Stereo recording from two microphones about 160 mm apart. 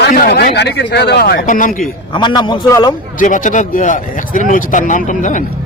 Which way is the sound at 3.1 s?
55° left (ahead or behind).